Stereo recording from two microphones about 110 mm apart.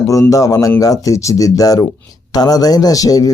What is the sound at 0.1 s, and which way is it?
Speech, 30° left (ahead or behind).